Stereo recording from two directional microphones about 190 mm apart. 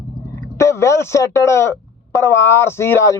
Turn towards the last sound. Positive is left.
turn(degrees=15)  # may be behind; listen again after turning